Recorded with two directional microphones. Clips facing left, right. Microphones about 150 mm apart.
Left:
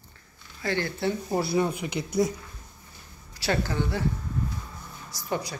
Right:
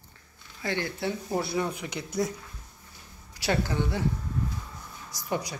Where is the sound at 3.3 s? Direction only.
15° right (ahead or behind).